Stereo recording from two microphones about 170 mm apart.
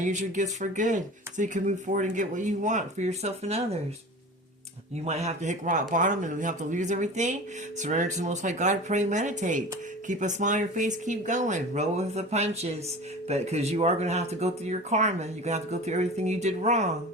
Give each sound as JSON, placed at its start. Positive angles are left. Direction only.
{"t": 0.0, "sound": "speech", "side_deg": -45}
{"t": 5.0, "sound": "speech", "side_deg": -40}